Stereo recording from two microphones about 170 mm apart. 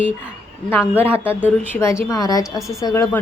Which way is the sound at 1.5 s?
15° left (ahead or behind).